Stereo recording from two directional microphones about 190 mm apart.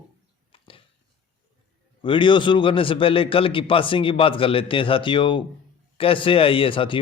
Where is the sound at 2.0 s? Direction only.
25° left (ahead or behind).